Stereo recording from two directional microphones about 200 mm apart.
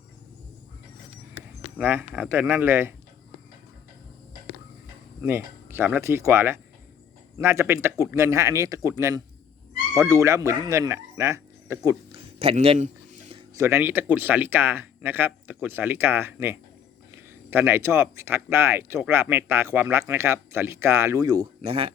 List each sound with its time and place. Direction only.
1.8 s speech: 10° right (ahead or behind)
5.2 s speech: 10° right (ahead or behind)
12.4 s a sound: 30° right (ahead or behind)
13.5 s speech: 15° right (ahead or behind)